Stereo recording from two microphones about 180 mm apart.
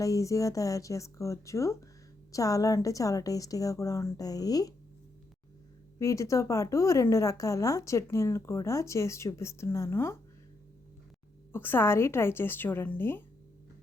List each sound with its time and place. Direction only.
0.0 s a woman's voice: 20° left (ahead or behind)
6.0 s a woman's voice: 15° left (ahead or behind)
11.5 s a woman's voice: 10° left (ahead or behind)